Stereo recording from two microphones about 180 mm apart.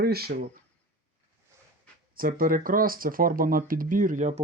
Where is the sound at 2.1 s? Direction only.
50° right (ahead or behind).